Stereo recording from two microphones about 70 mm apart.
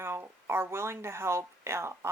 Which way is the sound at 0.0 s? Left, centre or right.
Right.